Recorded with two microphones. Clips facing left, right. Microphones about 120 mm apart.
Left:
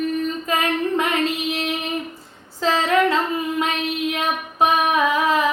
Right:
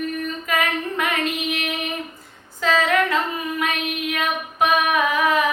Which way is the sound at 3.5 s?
25° left (ahead or behind).